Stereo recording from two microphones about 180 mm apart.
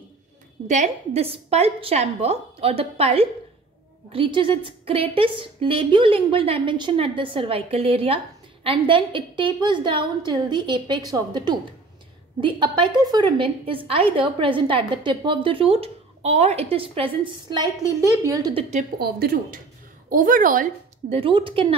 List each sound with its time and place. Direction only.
0.7 s a woman's voice: 35° right (ahead or behind)
18.2 s a woman's voice: 20° right (ahead or behind)
18.5 s a woman's voice: 35° right (ahead or behind)
18.9 s a woman's voice: 60° right (ahead or behind)
21.1 s a woman's voice: 30° right (ahead or behind)